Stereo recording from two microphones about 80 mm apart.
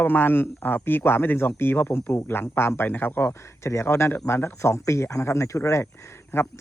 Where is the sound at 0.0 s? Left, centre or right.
Left.